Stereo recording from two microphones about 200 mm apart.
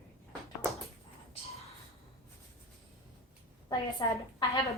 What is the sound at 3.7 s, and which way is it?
A woman's voice, 20° left (ahead or behind).